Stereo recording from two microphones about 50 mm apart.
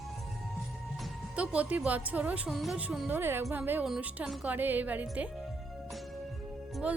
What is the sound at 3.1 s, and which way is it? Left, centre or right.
A woman's voice, right.